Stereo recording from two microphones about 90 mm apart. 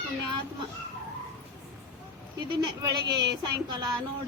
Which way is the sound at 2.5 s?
50° right (ahead or behind).